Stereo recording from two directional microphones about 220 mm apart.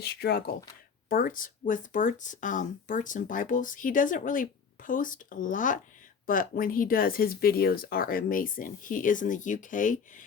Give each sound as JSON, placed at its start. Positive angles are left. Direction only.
{"t": 0.0, "sound": "speech", "side_deg": 45}